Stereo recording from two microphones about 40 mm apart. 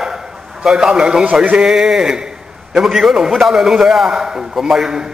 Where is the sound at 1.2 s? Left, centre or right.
Right.